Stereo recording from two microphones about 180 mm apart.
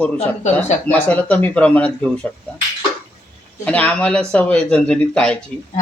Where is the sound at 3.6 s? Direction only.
5° left (ahead or behind).